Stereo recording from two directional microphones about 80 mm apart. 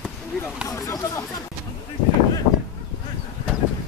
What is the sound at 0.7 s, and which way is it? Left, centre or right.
Speech, left.